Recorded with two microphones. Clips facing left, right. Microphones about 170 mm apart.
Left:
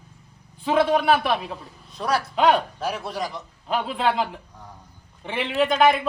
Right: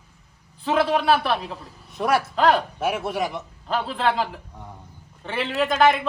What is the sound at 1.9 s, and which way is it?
Speech, 20° right (ahead or behind).